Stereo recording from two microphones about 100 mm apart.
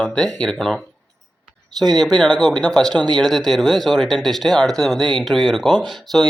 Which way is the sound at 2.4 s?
5° left (ahead or behind).